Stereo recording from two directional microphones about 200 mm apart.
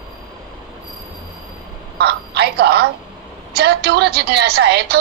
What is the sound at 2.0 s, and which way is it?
A man's voice, 55° right (ahead or behind).